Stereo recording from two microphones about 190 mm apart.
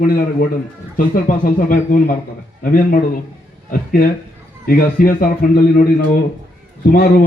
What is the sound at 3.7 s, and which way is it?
A man's voice, 50° left (ahead or behind).